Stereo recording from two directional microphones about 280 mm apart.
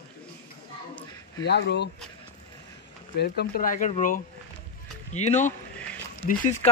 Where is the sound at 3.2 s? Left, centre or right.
Left.